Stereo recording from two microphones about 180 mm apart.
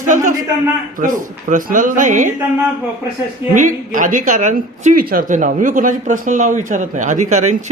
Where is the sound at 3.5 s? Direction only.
45° right (ahead or behind).